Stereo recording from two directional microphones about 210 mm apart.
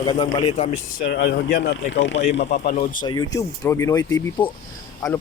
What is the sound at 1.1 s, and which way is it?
Speech, 50° left (ahead or behind).